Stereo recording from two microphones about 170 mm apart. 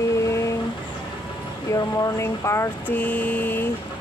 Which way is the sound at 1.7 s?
15° left (ahead or behind).